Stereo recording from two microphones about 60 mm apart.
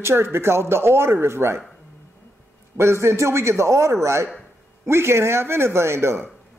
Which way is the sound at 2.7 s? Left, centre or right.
Right.